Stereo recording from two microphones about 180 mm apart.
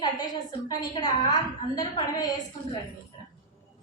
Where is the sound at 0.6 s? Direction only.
20° left (ahead or behind).